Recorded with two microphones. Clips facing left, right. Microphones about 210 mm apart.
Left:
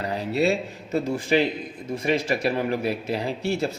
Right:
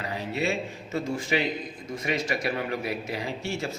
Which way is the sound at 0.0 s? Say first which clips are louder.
Left 6 dB; 35° left (ahead or behind).